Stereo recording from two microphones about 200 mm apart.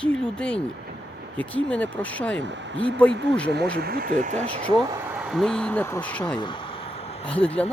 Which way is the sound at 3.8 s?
50° right (ahead or behind).